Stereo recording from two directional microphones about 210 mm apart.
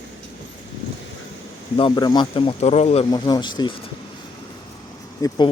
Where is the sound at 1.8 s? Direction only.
20° left (ahead or behind).